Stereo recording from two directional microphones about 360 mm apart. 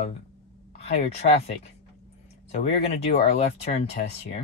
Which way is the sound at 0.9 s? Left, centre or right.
Centre.